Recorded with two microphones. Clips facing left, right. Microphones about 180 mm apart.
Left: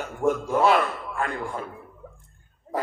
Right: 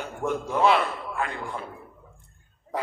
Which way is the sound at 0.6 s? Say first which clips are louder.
Even; 45° left (ahead or behind).